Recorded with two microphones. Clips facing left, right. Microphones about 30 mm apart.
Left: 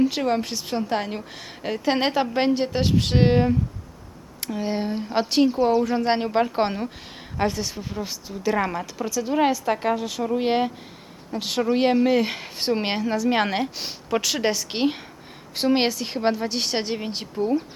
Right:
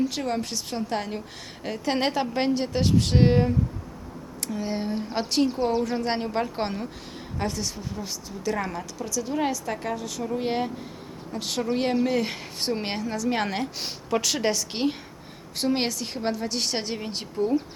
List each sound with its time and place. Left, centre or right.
0.0 s a woman's voice: left
4.5 s a woman's voice: centre
5.6 s a woman's voice: centre
5.9 s a woman's voice: centre
13.7 s a woman's voice: centre